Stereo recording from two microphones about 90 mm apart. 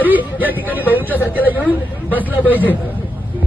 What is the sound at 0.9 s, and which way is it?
Speech, 20° right (ahead or behind).